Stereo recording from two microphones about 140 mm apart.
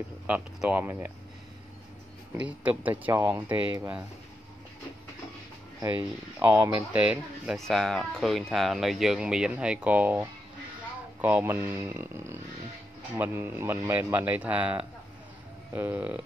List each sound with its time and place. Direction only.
0.3 s a man's voice: 10° right (ahead or behind)
2.3 s a man's voice: 10° right (ahead or behind)
6.4 s a man's voice: 10° right (ahead or behind)
7.5 s a man's voice: centre (ahead or behind)